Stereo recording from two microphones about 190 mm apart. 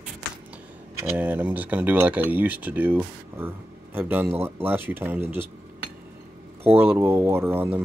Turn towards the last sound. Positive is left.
turn(degrees=-10)  # may be behind; listen again after turning